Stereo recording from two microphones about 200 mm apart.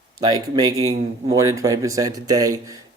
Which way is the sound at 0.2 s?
20° right (ahead or behind).